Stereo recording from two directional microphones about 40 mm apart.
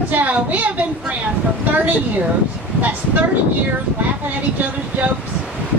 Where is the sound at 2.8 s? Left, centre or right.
Right.